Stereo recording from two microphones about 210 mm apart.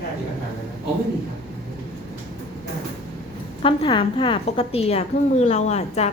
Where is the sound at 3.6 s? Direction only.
25° left (ahead or behind).